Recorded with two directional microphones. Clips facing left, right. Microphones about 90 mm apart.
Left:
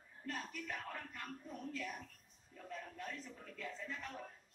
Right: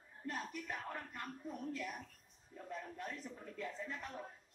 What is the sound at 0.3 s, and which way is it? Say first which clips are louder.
Speech: right 1 dB; 20° right (ahead or behind).